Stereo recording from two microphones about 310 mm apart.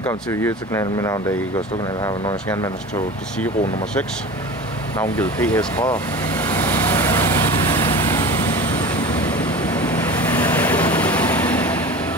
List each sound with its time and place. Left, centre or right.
0.0 s speech: centre
4.9 s speech: centre
6.4 s vehicle: centre